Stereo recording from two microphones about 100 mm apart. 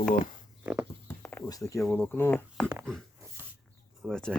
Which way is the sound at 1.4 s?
35° left (ahead or behind).